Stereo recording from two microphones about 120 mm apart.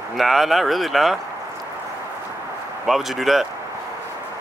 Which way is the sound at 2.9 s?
Centre (ahead or behind).